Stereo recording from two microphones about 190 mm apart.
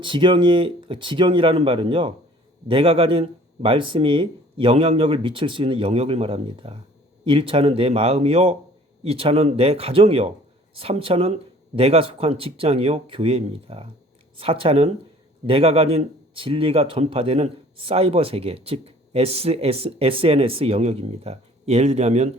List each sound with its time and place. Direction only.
0.0 s speech: 25° right (ahead or behind)